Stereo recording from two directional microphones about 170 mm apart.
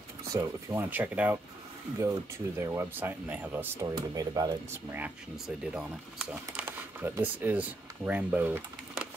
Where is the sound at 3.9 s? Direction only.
25° right (ahead or behind).